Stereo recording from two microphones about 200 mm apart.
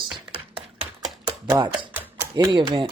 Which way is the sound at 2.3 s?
20° right (ahead or behind).